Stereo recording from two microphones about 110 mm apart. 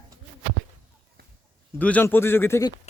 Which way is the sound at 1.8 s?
15° left (ahead or behind).